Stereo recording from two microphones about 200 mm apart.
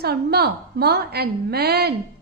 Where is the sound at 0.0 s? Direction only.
55° right (ahead or behind).